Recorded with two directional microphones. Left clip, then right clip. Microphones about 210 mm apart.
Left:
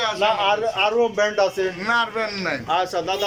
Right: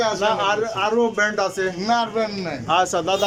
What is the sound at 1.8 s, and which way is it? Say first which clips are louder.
A man's voice: right 1 dB; 20° right (ahead or behind).